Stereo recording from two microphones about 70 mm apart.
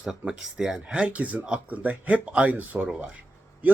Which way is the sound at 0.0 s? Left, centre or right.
Centre.